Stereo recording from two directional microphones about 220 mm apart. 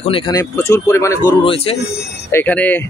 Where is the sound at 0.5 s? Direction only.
10° left (ahead or behind).